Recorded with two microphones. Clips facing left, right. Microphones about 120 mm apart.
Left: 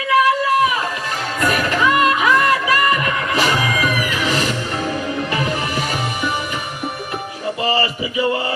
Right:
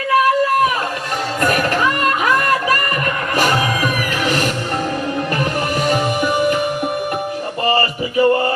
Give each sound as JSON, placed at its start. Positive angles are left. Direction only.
{"t": 1.4, "sound": "music", "side_deg": -45}
{"t": 7.7, "sound": "music", "side_deg": -45}